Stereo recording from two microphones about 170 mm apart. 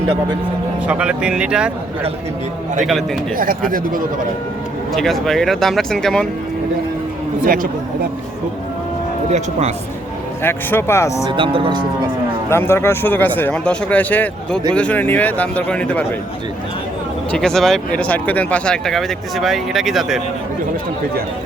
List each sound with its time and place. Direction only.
0.9 s speech: 5° right (ahead or behind)
3.3 s speech: 55° right (ahead or behind)
4.9 s speech: centre (ahead or behind)
7.4 s speech: 55° right (ahead or behind)
9.3 s speech: 40° right (ahead or behind)
10.4 s speech: 15° left (ahead or behind)
11.3 s cattle: 30° right (ahead or behind)
12.5 s speech: 15° left (ahead or behind)
17.3 s speech: 5° left (ahead or behind)